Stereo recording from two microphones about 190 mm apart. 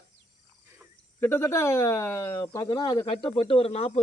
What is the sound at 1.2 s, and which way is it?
Speech, 10° left (ahead or behind).